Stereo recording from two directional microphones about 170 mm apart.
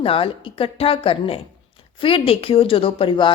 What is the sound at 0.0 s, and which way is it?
A woman's voice, 30° left (ahead or behind).